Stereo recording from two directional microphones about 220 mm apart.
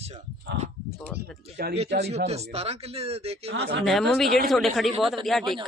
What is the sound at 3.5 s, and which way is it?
Speech, 50° right (ahead or behind).